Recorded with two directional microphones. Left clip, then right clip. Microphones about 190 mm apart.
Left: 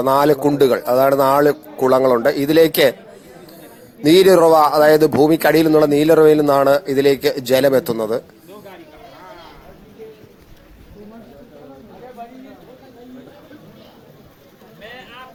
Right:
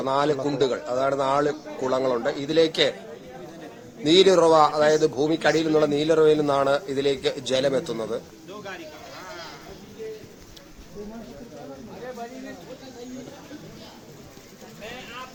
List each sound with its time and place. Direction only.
0.0 s a man's voice: 35° left (ahead or behind)
4.0 s a man's voice: 40° left (ahead or behind)